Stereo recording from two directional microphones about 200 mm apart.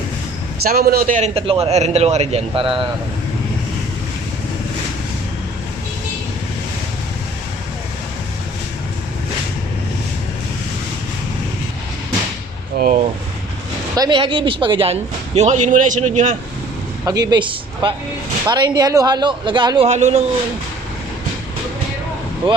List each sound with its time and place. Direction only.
0.7 s a man's voice: 50° right (ahead or behind); by 2.8 s 25° right (ahead or behind)
12.8 s a man's voice: 40° right (ahead or behind)
13.9 s speech: 20° right (ahead or behind)
15.4 s a man's voice: 35° right (ahead or behind)
17.1 s speech: 20° right (ahead or behind)
19.9 s a man's voice: 35° right (ahead or behind)
22.4 s speech: 25° right (ahead or behind)